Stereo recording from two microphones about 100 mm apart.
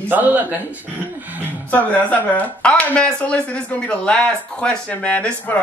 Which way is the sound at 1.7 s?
15° left (ahead or behind).